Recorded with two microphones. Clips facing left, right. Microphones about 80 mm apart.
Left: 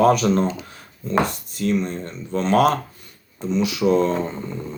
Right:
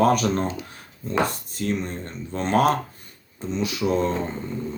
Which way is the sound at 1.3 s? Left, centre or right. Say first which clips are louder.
Left 4 dB; right.